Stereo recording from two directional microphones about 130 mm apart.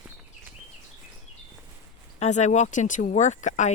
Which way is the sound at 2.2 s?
65° left (ahead or behind).